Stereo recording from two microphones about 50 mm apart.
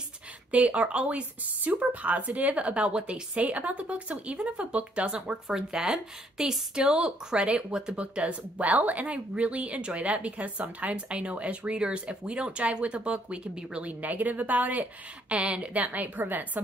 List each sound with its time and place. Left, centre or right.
0.5 s speech: right